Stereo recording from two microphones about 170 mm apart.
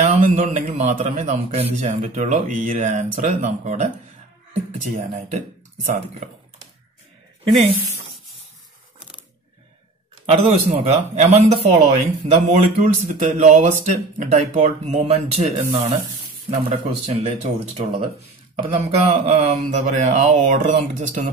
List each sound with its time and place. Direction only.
0.0 s a man's voice: 40° right (ahead or behind)
10.2 s a man's voice: 35° right (ahead or behind)